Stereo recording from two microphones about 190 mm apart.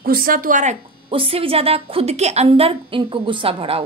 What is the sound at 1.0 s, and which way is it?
A woman's voice, 30° right (ahead or behind).